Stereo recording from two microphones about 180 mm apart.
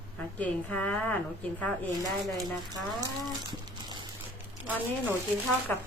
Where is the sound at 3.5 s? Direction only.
25° right (ahead or behind).